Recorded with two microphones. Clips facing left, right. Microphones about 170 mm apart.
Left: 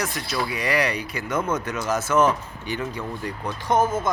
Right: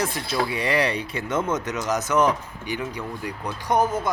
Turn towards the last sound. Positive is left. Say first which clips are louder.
# left 1 dB
turn(degrees=-15)  # may be behind; listen again after turning